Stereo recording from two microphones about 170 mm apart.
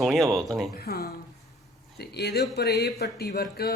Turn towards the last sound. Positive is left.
turn(degrees=65)  # may be behind; listen again after turning